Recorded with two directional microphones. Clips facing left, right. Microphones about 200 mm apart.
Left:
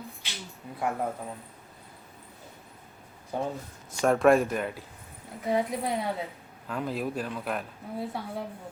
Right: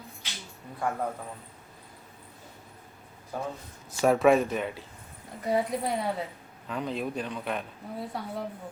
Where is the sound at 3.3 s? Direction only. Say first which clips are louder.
Left 3 dB; 25° left (ahead or behind).